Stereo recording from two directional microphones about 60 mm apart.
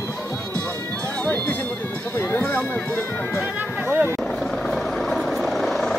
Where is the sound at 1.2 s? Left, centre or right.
Left.